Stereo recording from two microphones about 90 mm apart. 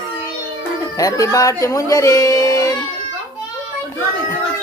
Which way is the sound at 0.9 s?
40° left (ahead or behind).